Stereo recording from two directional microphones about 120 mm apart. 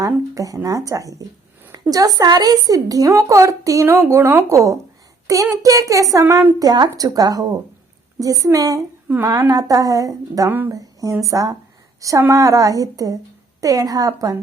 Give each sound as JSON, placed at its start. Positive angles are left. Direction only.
{"t": 0.0, "sound": "a woman's voice", "side_deg": -30}